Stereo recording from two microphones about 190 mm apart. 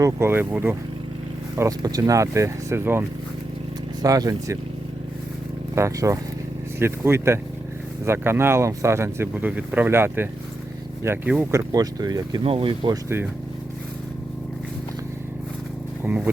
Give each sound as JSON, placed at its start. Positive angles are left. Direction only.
{"t": 0.0, "sound": "speech", "side_deg": -15}
{"t": 5.7, "sound": "speech", "side_deg": -15}
{"t": 16.0, "sound": "speech", "side_deg": -10}